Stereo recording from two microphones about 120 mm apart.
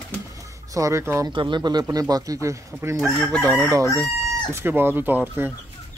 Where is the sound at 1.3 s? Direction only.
40° right (ahead or behind).